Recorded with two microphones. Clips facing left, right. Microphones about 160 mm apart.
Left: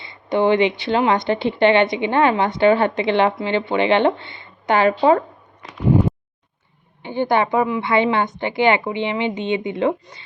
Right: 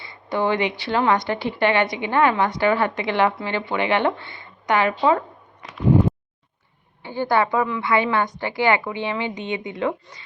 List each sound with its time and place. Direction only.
0.0 s a woman's voice: 20° left (ahead or behind)
7.0 s a woman's voice: 20° left (ahead or behind)